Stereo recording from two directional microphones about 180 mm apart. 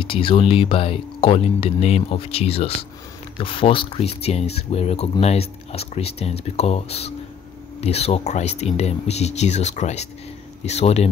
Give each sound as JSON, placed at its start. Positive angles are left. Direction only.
{"t": 0.0, "sound": "speech", "side_deg": 30}